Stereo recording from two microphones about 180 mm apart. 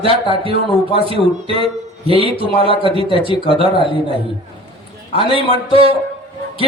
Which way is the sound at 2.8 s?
30° right (ahead or behind).